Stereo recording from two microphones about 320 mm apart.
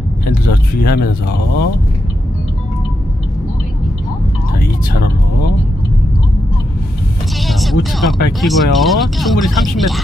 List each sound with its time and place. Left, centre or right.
0.3 s speech: left
7.3 s music: centre
8.3 s speech: centre